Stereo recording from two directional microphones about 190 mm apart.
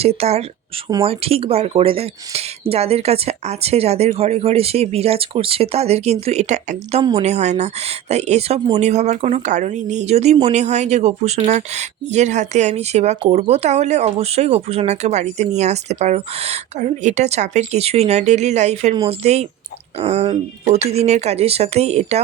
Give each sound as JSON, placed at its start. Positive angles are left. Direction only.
{"t": 0.0, "sound": "speech", "side_deg": -30}